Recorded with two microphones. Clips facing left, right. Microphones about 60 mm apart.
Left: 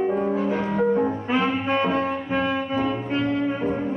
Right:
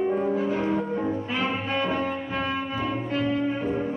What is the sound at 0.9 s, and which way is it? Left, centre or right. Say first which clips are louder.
Music: left 5 dB; left.